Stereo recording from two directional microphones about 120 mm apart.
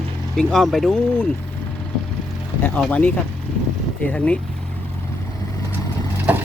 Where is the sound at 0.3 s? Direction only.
5° left (ahead or behind).